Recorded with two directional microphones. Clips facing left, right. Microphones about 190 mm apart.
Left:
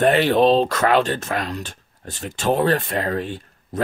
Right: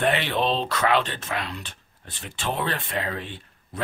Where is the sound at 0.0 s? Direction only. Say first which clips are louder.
Left 8 dB; 40° left (ahead or behind).